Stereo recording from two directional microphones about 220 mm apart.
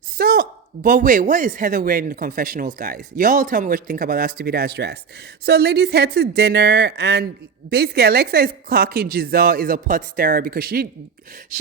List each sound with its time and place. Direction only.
0.2 s a woman's voice: 45° right (ahead or behind)